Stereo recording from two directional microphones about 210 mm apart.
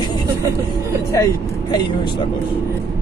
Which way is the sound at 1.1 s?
15° left (ahead or behind).